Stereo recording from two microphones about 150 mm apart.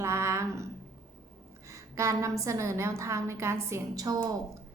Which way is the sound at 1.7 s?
20° right (ahead or behind).